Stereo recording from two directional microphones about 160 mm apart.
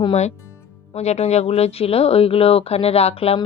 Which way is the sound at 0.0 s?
40° left (ahead or behind).